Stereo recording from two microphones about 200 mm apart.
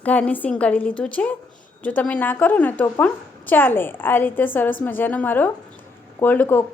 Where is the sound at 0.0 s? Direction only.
5° left (ahead or behind).